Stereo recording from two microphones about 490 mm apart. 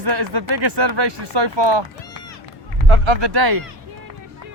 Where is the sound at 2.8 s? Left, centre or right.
Right.